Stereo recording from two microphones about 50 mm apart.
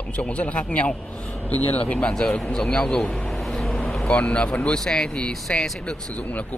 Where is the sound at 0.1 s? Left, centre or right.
Left.